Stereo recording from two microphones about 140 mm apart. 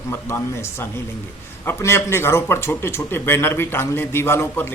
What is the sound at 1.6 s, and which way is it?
A man's voice, 20° left (ahead or behind).